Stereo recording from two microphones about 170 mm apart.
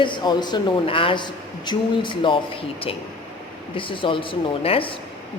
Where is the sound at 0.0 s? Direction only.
30° left (ahead or behind).